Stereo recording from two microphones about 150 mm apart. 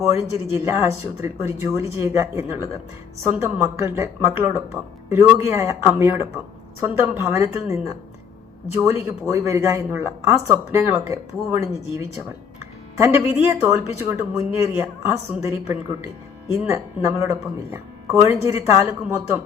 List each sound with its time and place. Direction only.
0.0 s speech: 20° right (ahead or behind)
13.0 s speech: 15° right (ahead or behind)